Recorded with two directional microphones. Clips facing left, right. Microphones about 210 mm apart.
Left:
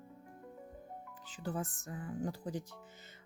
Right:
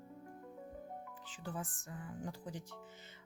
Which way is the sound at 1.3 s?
40° left (ahead or behind).